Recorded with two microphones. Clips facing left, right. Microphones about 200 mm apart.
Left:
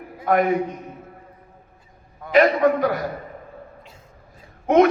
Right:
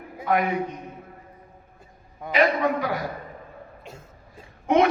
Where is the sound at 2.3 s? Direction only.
45° left (ahead or behind).